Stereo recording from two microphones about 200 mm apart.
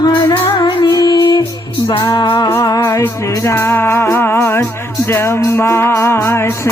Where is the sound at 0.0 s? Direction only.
20° left (ahead or behind).